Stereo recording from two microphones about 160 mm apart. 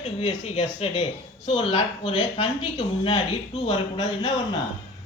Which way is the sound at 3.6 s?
35° left (ahead or behind).